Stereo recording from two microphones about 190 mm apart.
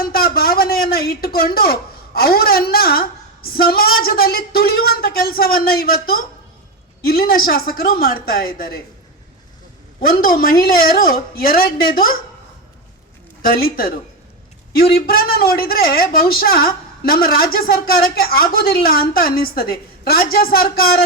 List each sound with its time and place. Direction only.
0.0 s a woman's voice: 50° left (ahead or behind)
10.1 s a woman's voice: 50° left (ahead or behind)
13.4 s a woman's voice: 50° left (ahead or behind)